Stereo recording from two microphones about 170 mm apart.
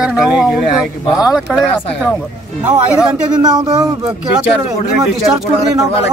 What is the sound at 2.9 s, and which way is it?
Speech, 5° right (ahead or behind).